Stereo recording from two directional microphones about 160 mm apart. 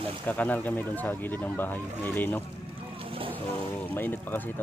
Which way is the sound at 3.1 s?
35° right (ahead or behind).